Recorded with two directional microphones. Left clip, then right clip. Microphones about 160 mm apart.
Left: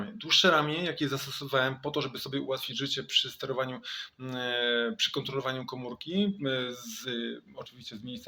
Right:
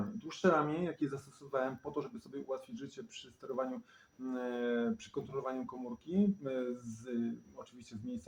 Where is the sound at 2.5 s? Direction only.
25° left (ahead or behind).